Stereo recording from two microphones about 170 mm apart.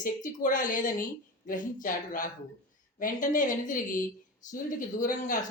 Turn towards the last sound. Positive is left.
turn(degrees=50)  # may be behind; listen again after turning